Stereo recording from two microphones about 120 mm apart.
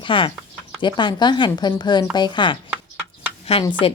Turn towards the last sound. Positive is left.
turn(degrees=55)  # may be behind; listen again after turning